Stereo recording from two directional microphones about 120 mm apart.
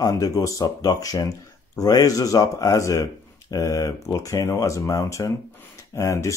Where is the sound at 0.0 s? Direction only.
30° left (ahead or behind).